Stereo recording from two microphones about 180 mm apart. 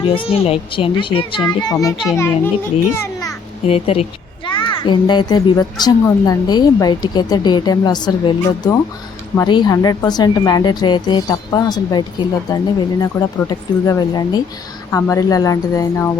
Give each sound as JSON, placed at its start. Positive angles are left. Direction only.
{"t": 0.0, "sound": "a child's voice", "side_deg": 30}
{"t": 3.7, "sound": "a woman's voice", "side_deg": 35}